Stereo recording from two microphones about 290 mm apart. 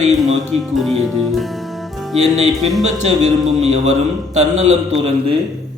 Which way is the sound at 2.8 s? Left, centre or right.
Right.